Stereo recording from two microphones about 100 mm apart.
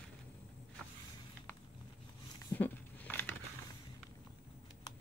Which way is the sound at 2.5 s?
20° left (ahead or behind).